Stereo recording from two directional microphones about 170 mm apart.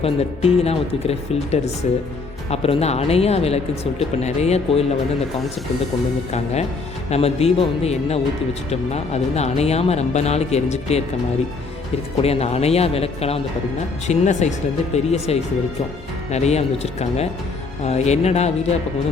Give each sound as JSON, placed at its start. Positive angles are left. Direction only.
{"t": 0.0, "sound": "speech", "side_deg": 35}
{"t": 6.3, "sound": "speech", "side_deg": 40}
{"t": 12.1, "sound": "speech", "side_deg": 35}